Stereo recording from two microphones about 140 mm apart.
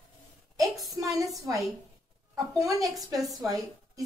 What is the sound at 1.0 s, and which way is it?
A woman's voice, 25° right (ahead or behind).